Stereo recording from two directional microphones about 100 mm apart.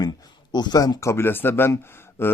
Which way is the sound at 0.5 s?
45° left (ahead or behind).